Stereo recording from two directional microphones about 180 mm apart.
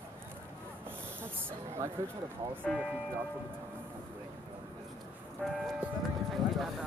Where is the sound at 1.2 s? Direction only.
15° right (ahead or behind).